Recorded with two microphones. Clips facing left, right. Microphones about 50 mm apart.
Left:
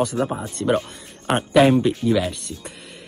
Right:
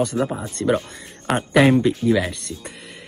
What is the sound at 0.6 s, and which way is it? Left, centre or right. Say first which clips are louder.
Speech: right 1 dB; centre.